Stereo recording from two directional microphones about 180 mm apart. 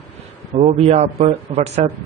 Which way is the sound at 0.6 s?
35° right (ahead or behind).